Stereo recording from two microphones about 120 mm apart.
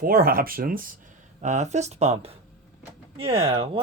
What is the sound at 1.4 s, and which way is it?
Speech, 75° right (ahead or behind).